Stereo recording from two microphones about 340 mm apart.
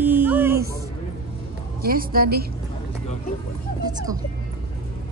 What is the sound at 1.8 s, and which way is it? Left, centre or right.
Music, right.